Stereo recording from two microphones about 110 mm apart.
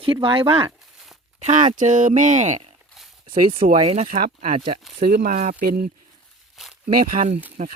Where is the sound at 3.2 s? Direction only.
55° right (ahead or behind); by 4.7 s 90° right.